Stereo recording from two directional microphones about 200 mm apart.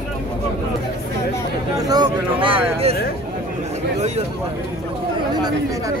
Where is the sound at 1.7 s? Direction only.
20° right (ahead or behind).